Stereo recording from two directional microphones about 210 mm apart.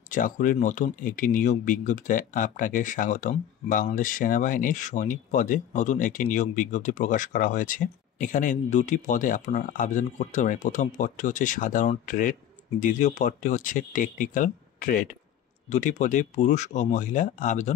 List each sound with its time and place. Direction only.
0.1 s speech: 40° left (ahead or behind)